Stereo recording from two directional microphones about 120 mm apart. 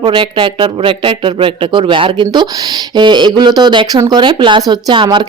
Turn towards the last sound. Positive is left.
turn(degrees=-40)  # may be behind; listen again after turning